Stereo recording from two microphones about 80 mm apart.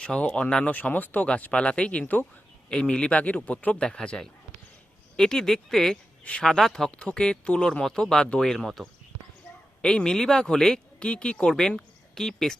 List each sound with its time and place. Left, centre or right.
0.0 s speech: centre